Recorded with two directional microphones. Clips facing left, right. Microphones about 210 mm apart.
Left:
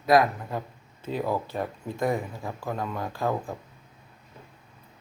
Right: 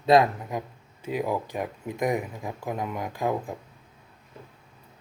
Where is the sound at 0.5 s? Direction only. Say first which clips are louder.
Right 1 dB; 15° right (ahead or behind).